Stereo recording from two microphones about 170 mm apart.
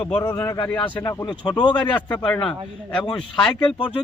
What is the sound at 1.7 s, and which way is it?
A man's voice, 10° left (ahead or behind).